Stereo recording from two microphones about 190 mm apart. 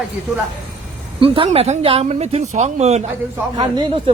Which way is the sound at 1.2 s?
30° right (ahead or behind).